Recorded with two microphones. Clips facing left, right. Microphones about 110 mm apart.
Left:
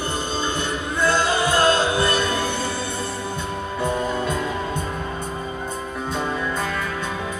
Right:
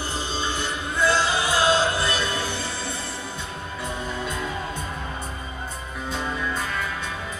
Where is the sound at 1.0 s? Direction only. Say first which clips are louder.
Left 2 dB; 5° right (ahead or behind).